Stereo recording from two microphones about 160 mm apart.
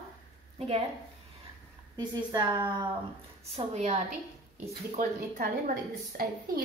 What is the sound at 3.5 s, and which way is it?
Speech, 45° right (ahead or behind).